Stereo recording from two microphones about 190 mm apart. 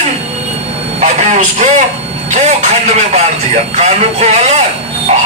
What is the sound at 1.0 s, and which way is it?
A man's voice, 35° right (ahead or behind).